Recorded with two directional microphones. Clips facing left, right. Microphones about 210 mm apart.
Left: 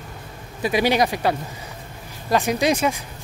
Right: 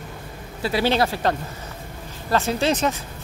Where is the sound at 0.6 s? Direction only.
15° left (ahead or behind).